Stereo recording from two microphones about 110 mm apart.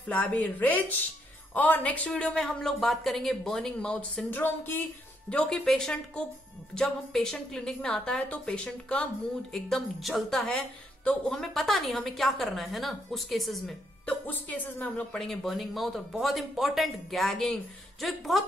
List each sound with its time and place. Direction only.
0.1 s a woman's voice: 15° left (ahead or behind)
14.0 s a woman's voice: 15° left (ahead or behind)
15.1 s a woman's voice: centre (ahead or behind)